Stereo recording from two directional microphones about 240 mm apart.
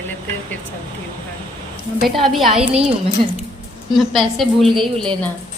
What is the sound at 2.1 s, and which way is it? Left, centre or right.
Speech, centre.